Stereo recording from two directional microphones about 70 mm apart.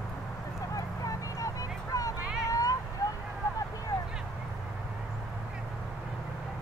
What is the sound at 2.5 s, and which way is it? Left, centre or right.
Vehicle, left.